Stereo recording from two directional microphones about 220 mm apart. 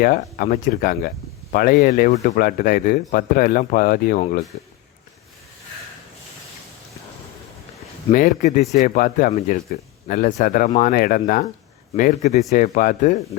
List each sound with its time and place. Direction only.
0.0 s speech: 40° left (ahead or behind)
8.1 s speech: 35° left (ahead or behind)